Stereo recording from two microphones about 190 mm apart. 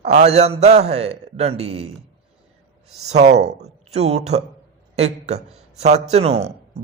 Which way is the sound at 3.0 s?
35° right (ahead or behind).